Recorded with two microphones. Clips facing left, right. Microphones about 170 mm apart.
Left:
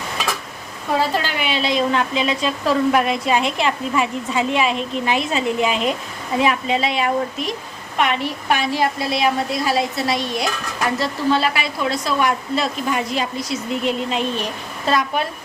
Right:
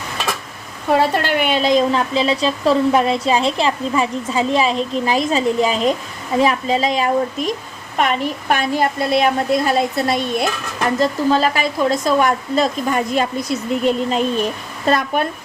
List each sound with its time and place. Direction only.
0.9 s a woman's voice: 55° right (ahead or behind)
9.6 s speech: centre (ahead or behind)
10.8 s a woman's voice: 45° right (ahead or behind)